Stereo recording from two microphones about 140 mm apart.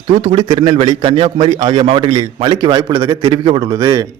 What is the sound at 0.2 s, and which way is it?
A man's voice, 35° right (ahead or behind).